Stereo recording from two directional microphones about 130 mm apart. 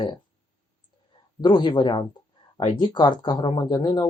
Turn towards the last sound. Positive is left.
turn(degrees=35)  # may be behind; listen again after turning